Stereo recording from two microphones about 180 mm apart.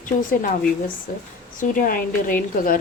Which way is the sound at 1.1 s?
50° left (ahead or behind).